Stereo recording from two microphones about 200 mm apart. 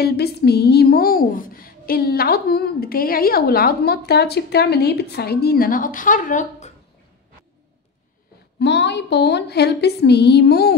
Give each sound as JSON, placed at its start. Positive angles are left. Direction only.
{"t": 0.0, "sound": "speech", "side_deg": 55}
{"t": 8.5, "sound": "a woman's voice", "side_deg": 60}